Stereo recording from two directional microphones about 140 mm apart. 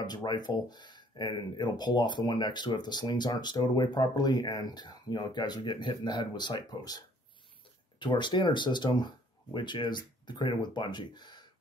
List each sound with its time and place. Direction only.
0.0 s speech: 30° left (ahead or behind)